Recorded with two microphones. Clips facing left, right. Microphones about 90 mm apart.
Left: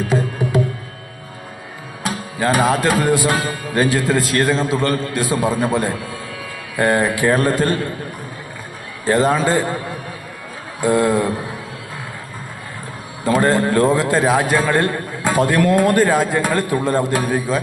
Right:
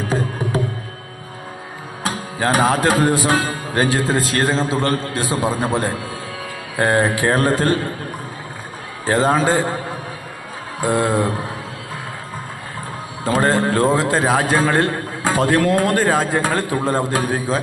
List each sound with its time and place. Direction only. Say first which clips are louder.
0.1 s music: left 1 dB; 35° right (ahead or behind)
2.0 s a man's voice: left 1 dB; 35° right (ahead or behind)
9.1 s speech: even; 30° right (ahead or behind)
10.8 s a man's voice: left 2 dB; 25° right (ahead or behind)
13.2 s a man's voice: left 1 dB; 25° right (ahead or behind)